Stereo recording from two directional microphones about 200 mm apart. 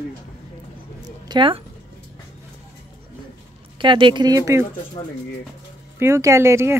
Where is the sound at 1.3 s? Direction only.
25° right (ahead or behind).